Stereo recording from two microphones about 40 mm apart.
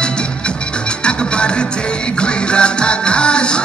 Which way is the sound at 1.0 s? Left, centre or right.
Left.